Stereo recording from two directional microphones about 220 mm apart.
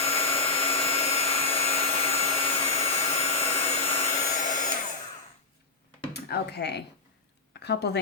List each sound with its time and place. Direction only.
0.0 s vacuum cleaner: 25° left (ahead or behind)
6.1 s a woman's voice: 45° left (ahead or behind)